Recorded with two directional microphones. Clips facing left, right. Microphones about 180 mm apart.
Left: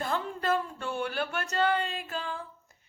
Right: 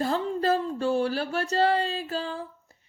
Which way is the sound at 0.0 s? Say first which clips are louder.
Right 6 dB; 35° right (ahead or behind).